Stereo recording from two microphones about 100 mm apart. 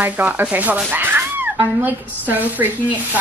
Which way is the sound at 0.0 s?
15° right (ahead or behind).